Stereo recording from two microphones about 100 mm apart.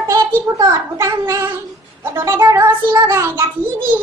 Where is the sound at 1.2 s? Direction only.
25° right (ahead or behind).